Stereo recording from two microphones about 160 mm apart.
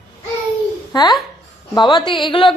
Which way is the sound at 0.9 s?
25° left (ahead or behind).